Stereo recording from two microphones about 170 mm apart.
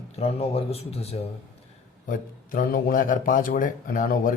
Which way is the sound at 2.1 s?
55° left (ahead or behind).